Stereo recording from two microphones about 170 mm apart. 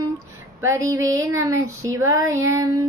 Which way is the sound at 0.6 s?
20° right (ahead or behind).